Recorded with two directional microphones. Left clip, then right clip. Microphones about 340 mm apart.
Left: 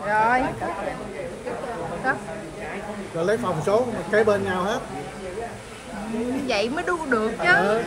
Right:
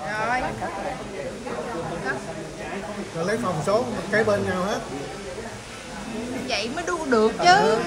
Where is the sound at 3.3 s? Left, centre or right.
Centre.